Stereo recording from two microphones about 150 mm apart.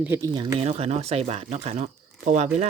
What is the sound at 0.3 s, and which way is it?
Speech, 30° right (ahead or behind).